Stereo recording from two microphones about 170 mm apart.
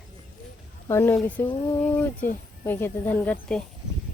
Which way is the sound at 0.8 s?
15° left (ahead or behind).